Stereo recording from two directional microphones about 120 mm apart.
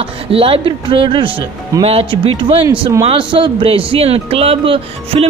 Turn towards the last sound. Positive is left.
turn(degrees=-50)  # may be behind; listen again after turning